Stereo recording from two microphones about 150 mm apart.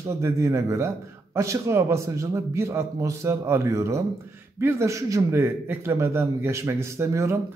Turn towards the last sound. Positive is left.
turn(degrees=-20)  # may be behind; listen again after turning